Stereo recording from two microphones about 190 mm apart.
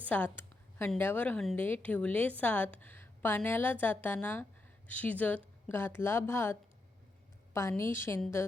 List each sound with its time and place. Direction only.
0.0 s a woman's voice: 10° left (ahead or behind)